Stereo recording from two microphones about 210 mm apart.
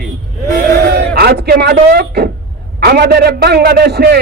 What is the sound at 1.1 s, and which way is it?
A man's voice, 50° right (ahead or behind).